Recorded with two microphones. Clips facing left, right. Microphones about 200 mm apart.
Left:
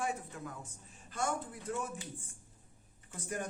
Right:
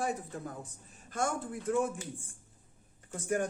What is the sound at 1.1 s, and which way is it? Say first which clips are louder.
Speech: right 3 dB; 45° right (ahead or behind).